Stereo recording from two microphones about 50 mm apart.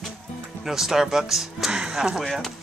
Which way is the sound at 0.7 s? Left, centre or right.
Centre.